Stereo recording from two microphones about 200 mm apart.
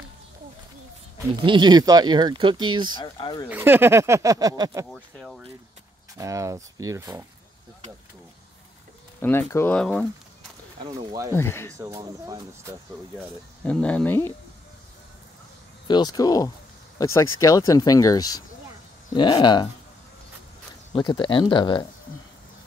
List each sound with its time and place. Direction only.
1.4 s speech: 25° right (ahead or behind)
3.0 s speech: 25° left (ahead or behind)
3.4 s speech: 10° right (ahead or behind)
4.9 s speech: 5° left (ahead or behind)
6.1 s speech: 15° right (ahead or behind)
9.2 s speech: 10° left (ahead or behind)
11.1 s speech: 15° right (ahead or behind)
11.3 s speech: 10° left (ahead or behind)
11.8 s speech: 15° right (ahead or behind)
13.7 s speech: 5° left (ahead or behind)
15.9 s speech: 20° left (ahead or behind)
20.9 s speech: 20° left (ahead or behind)